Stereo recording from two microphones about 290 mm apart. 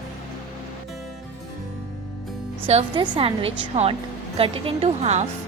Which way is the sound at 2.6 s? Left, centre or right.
Centre.